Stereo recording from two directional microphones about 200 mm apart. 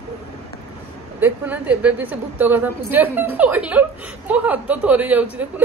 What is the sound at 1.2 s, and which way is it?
A woman's voice, 10° right (ahead or behind).